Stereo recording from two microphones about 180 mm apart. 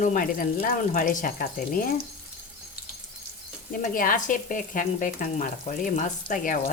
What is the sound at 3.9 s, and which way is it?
Speech, 50° left (ahead or behind).